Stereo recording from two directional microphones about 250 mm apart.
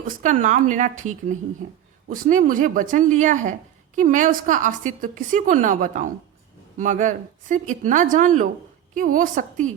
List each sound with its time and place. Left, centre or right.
0.2 s a woman's voice: right